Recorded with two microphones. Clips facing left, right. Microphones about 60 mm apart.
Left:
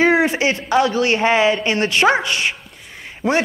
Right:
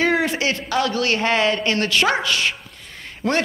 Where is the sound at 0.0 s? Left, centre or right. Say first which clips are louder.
Left 4 dB; left.